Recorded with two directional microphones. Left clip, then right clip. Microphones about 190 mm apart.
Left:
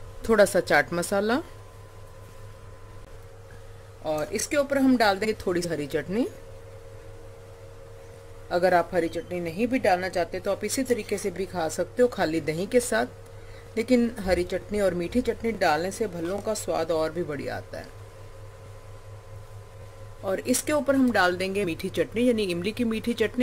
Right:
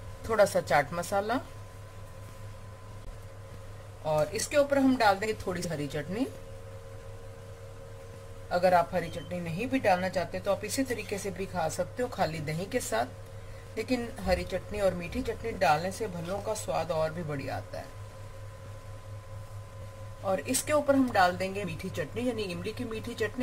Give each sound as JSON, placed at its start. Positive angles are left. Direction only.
{"t": 0.3, "sound": "speech", "side_deg": 60}
{"t": 4.1, "sound": "speech", "side_deg": 55}
{"t": 8.5, "sound": "speech", "side_deg": 60}
{"t": 20.2, "sound": "speech", "side_deg": 60}